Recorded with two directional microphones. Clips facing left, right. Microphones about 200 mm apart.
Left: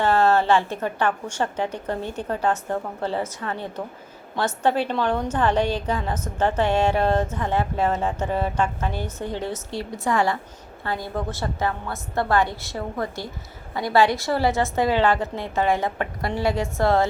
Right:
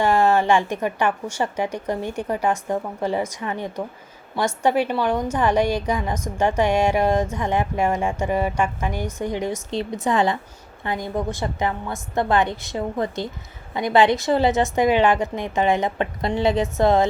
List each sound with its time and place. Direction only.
0.0 s a woman's voice: 10° right (ahead or behind)